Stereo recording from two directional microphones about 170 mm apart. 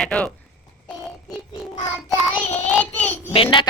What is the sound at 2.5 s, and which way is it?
Speech, 10° left (ahead or behind).